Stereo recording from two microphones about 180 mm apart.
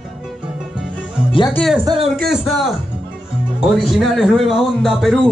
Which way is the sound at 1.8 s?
25° right (ahead or behind).